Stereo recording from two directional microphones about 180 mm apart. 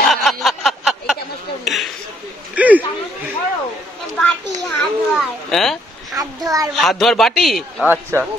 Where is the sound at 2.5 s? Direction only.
10° right (ahead or behind).